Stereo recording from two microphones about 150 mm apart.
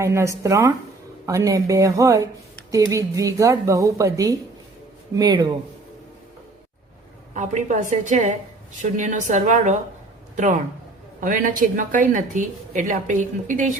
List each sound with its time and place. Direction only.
0.0 s speech: 20° right (ahead or behind)
7.3 s speech: 55° right (ahead or behind)
11.2 s speech: 65° right (ahead or behind)